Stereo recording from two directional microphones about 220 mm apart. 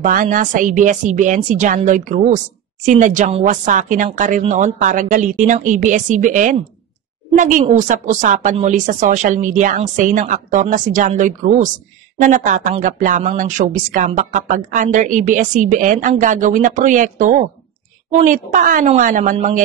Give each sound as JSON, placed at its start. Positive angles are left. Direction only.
{"t": 0.0, "sound": "speech", "side_deg": -35}